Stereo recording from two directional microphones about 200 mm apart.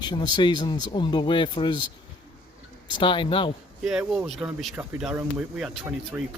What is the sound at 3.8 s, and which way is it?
Speech, 5° right (ahead or behind).